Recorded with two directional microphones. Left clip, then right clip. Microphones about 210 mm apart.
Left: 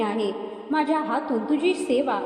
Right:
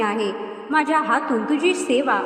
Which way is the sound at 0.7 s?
20° right (ahead or behind).